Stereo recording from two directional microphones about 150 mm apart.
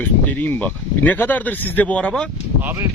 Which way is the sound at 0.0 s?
10° left (ahead or behind).